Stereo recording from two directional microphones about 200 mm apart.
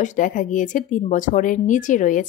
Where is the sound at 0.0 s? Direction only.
40° left (ahead or behind).